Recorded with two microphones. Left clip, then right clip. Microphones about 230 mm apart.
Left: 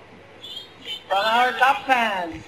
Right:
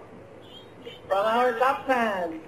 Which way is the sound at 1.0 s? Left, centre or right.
Centre.